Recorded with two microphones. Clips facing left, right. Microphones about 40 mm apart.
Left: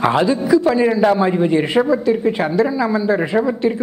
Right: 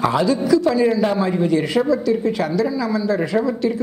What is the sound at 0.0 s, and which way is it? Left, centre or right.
A man's voice, left.